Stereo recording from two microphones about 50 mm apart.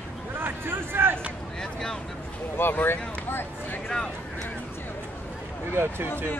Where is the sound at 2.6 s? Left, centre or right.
Left.